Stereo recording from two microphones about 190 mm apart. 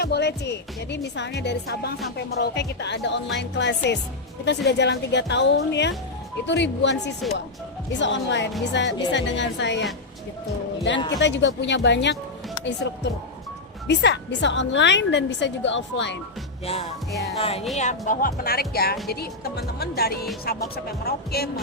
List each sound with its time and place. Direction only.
0.0 s a woman's voice: 60° left (ahead or behind)
11.2 s a woman's voice: 70° left (ahead or behind)
17.3 s speech: 30° left (ahead or behind); by 21.5 s 55° left (ahead or behind)